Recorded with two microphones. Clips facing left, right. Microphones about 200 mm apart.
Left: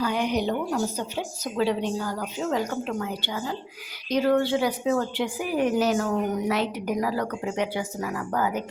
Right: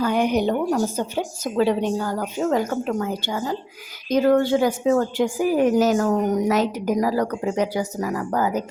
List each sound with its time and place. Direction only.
0.0 s speech: 50° right (ahead or behind)